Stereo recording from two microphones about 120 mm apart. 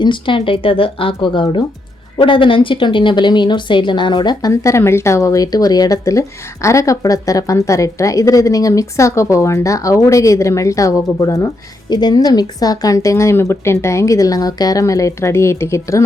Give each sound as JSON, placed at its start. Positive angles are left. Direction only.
{"t": 0.0, "sound": "speech", "side_deg": 40}